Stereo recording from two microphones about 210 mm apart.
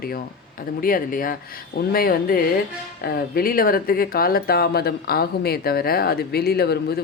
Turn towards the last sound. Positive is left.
turn(degrees=50)  # may be behind; listen again after turning